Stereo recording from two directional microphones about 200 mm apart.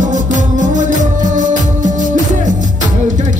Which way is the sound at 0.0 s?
40° right (ahead or behind).